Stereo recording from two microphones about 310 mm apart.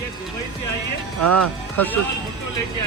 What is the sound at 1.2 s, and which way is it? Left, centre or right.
Speech, right.